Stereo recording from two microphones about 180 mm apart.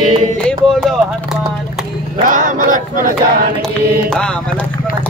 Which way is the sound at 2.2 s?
45° right (ahead or behind).